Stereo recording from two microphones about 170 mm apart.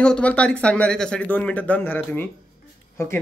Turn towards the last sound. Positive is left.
turn(degrees=15)  # may be behind; listen again after turning